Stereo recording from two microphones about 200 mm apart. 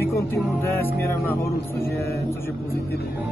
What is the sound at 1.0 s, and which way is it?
Speech, 10° left (ahead or behind).